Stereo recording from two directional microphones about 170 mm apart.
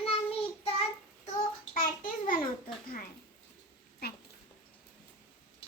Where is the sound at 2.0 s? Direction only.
55° left (ahead or behind).